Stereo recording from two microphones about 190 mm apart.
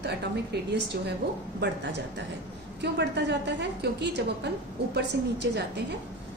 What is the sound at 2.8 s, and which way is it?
A woman's voice, 65° right (ahead or behind).